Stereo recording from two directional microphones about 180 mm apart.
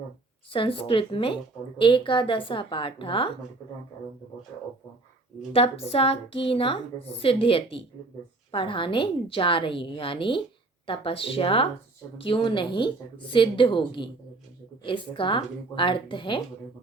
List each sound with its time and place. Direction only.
0.5 s a woman's voice: 30° left (ahead or behind)
5.5 s a woman's voice: 35° left (ahead or behind)